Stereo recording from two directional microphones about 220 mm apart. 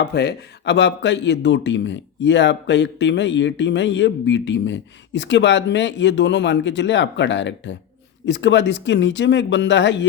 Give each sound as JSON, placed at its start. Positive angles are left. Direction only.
{"t": 0.0, "sound": "a man's voice", "side_deg": 50}